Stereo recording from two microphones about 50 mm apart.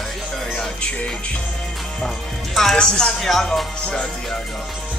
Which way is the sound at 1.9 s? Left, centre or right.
Centre.